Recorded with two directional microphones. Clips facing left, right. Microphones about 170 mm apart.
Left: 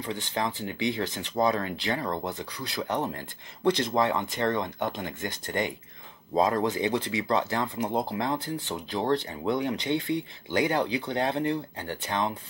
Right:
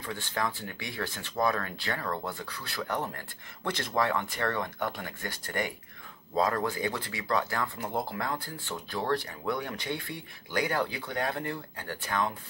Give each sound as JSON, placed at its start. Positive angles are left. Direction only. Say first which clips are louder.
{"t": 0.0, "sound": "speech", "louder": "left 3 dB", "side_deg": 20}